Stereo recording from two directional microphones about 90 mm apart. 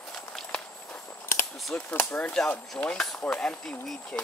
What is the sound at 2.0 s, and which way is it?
Speech, 15° left (ahead or behind).